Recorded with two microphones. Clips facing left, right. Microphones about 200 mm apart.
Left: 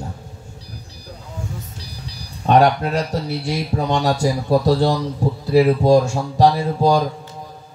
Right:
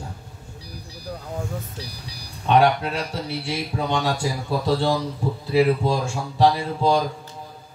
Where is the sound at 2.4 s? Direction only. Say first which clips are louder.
Left 3 dB; 40° left (ahead or behind).